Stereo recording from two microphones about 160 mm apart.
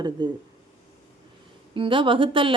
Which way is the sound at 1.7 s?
30° right (ahead or behind).